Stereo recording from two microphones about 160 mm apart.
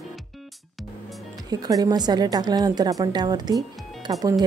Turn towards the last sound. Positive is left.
turn(degrees=-20)  # may be behind; listen again after turning